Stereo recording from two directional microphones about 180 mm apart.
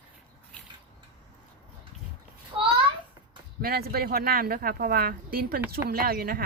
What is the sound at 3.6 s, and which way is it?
Speech, 55° right (ahead or behind).